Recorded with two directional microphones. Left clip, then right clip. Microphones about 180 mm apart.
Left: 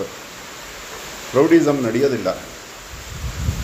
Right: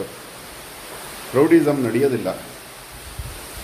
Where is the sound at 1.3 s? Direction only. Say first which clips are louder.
Left 1 dB; 5° right (ahead or behind).